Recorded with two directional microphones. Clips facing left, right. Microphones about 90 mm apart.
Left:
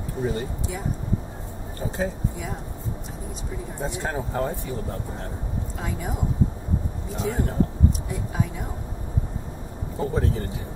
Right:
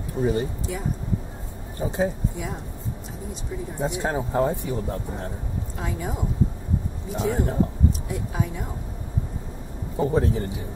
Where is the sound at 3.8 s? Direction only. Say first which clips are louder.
Right 3 dB; 15° right (ahead or behind).